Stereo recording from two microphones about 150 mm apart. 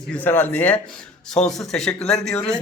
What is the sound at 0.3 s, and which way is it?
A man's voice, 15° left (ahead or behind).